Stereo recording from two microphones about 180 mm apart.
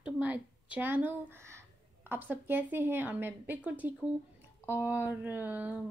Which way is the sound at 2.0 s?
10° right (ahead or behind).